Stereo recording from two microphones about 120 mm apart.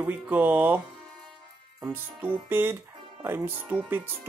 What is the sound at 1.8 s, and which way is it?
Speech, 15° right (ahead or behind).